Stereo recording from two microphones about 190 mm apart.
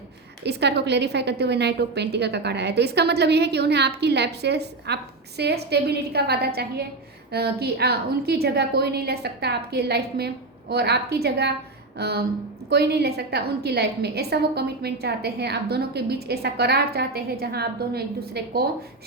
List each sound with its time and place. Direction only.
0.4 s a woman's voice: 60° right (ahead or behind)